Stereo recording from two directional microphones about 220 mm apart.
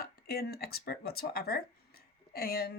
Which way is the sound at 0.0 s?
45° left (ahead or behind).